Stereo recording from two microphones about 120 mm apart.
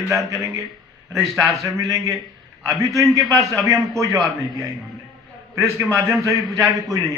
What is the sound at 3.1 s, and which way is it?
A man's voice, 30° right (ahead or behind).